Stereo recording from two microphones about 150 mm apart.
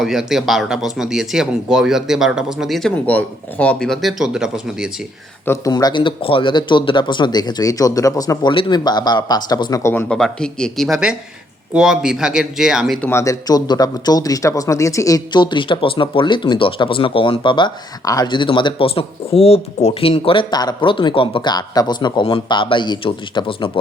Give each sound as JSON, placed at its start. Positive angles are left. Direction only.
{"t": 0.0, "sound": "speech", "side_deg": 0}
{"t": 5.5, "sound": "speech", "side_deg": 25}
{"t": 10.1, "sound": "speech", "side_deg": 5}
{"t": 13.0, "sound": "a man's voice", "side_deg": 15}